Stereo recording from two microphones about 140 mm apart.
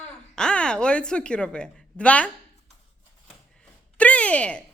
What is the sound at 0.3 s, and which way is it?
A woman's voice, 5° left (ahead or behind).